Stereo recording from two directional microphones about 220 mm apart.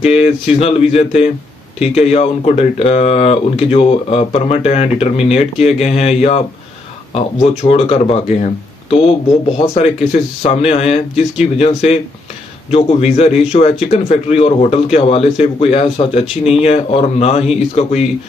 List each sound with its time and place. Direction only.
0.0 s speech: 30° left (ahead or behind)
7.4 s speech: 25° left (ahead or behind)
9.6 s speech: 30° left (ahead or behind)